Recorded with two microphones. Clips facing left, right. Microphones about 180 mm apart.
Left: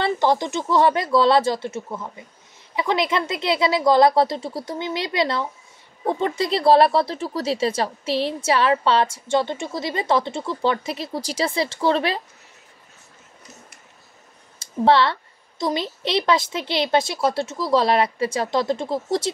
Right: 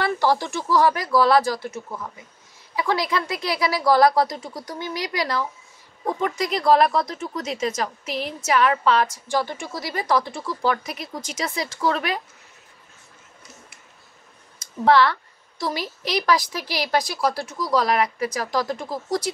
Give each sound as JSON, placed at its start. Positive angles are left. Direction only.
{"t": 0.0, "sound": "speech", "side_deg": 20}
{"t": 14.6, "sound": "speech", "side_deg": 25}